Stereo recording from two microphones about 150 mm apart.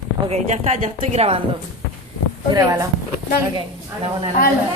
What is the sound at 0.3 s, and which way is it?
A woman's voice, 50° right (ahead or behind).